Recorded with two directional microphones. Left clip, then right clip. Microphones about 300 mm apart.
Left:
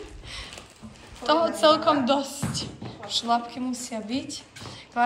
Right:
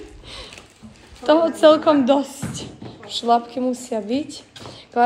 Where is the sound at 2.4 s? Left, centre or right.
Centre.